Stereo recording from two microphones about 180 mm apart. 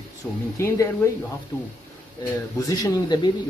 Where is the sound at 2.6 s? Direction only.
20° left (ahead or behind).